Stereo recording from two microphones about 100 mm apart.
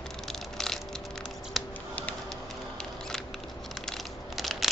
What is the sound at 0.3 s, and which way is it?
Crushing, 5° left (ahead or behind).